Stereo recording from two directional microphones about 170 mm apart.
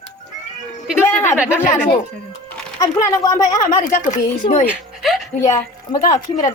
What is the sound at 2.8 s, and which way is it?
Speech, 20° left (ahead or behind).